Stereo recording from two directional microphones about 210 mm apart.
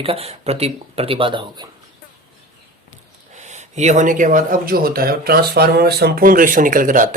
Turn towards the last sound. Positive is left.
turn(degrees=-40)  # may be behind; listen again after turning